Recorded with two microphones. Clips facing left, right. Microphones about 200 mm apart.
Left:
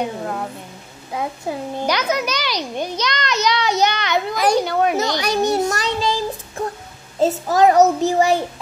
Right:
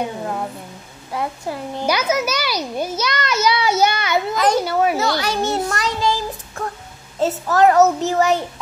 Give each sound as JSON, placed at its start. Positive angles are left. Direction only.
{"t": 1.1, "sound": "a child's voice", "side_deg": 10}
{"t": 1.9, "sound": "a child's voice", "side_deg": -5}
{"t": 4.9, "sound": "a child's voice", "side_deg": 15}
{"t": 5.7, "sound": "child singing", "side_deg": 15}
{"t": 7.2, "sound": "a child's voice", "side_deg": 15}